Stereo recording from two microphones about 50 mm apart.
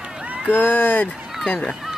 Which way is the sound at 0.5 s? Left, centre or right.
Left.